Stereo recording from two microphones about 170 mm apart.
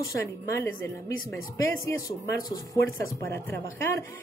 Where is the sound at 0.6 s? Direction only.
15° left (ahead or behind).